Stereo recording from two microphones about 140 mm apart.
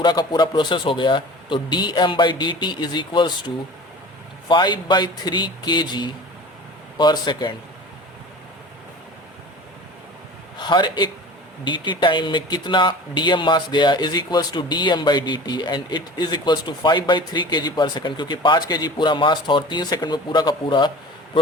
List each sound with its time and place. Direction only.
0.0 s speech: 30° left (ahead or behind)
10.6 s a man's voice: 35° left (ahead or behind)